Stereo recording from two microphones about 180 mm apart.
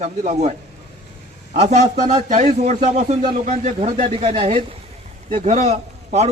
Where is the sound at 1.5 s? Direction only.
40° right (ahead or behind).